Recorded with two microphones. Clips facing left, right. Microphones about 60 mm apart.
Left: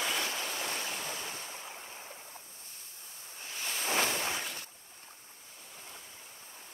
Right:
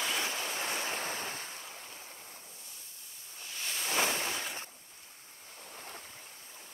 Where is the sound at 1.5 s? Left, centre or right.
Left.